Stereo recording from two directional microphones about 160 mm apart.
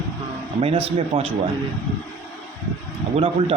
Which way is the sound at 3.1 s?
35° right (ahead or behind).